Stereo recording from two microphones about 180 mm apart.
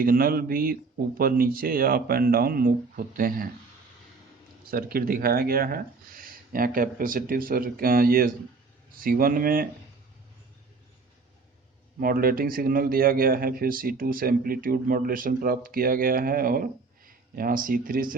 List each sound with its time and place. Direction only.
0.0 s speech: 50° right (ahead or behind)
4.7 s speech: 55° right (ahead or behind)
11.9 s speech: 55° right (ahead or behind)